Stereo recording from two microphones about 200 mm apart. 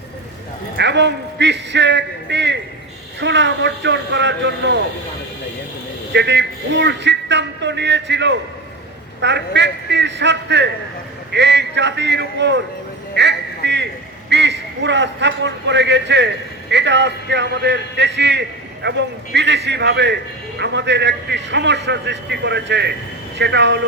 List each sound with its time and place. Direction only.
0.8 s a man's voice: 60° right (ahead or behind)
6.1 s a man's voice: 60° right (ahead or behind)
13.1 s a sound: 60° right (ahead or behind)
14.3 s a man's voice: 60° right (ahead or behind)